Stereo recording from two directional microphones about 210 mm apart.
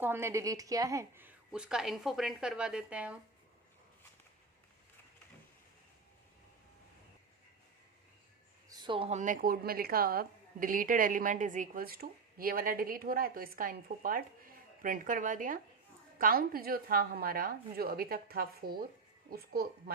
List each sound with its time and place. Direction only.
0.0 s a woman's voice: 10° right (ahead or behind)
8.7 s a woman's voice: 20° right (ahead or behind); by 19.6 s 45° right (ahead or behind)